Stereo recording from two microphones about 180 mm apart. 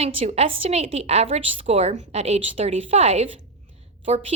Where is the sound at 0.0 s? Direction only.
30° right (ahead or behind).